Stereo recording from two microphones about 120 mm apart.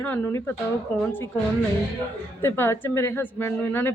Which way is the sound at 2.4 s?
20° left (ahead or behind).